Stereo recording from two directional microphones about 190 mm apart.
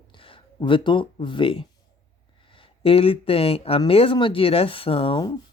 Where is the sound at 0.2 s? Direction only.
25° left (ahead or behind).